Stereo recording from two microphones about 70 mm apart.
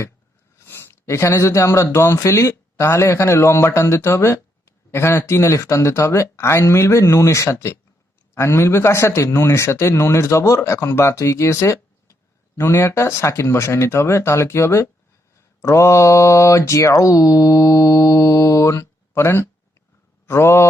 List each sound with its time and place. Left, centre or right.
0.6 s a sound: left
1.0 s speech: left
15.6 s mantra: left
20.2 s speech: left